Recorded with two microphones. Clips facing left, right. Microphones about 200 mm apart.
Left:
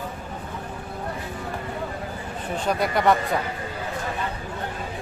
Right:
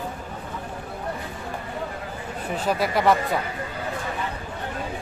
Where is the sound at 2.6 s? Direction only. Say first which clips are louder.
Even; 5° right (ahead or behind).